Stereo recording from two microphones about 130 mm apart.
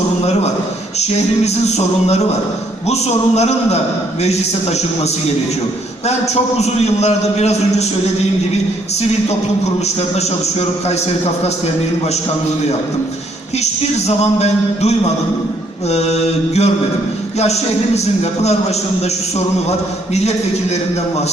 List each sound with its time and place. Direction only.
1.6 s a man's voice: 55° left (ahead or behind)
6.1 s a man's voice: 55° left (ahead or behind)
10.2 s a man's voice: 55° left (ahead or behind)
14.2 s a man's voice: 55° left (ahead or behind)
17.9 s a man's voice: 55° left (ahead or behind)